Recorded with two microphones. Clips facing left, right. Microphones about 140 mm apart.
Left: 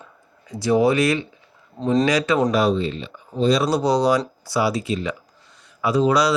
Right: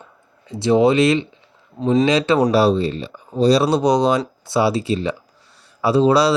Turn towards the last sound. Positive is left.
turn(degrees=-30)  # may be behind; listen again after turning